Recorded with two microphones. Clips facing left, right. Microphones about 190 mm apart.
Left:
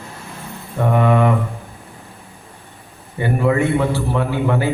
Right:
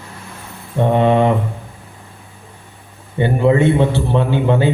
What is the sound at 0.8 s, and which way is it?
Speech, 25° right (ahead or behind).